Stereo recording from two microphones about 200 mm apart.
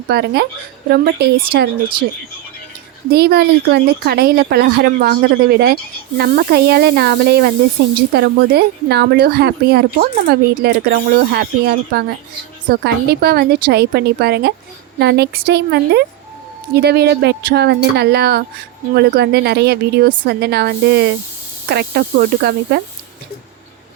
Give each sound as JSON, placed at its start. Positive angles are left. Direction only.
{"t": 0.1, "sound": "speech", "side_deg": -55}
{"t": 3.1, "sound": "speech", "side_deg": -50}